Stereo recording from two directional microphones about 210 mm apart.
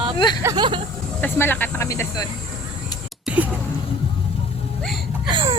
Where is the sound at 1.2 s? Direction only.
10° left (ahead or behind).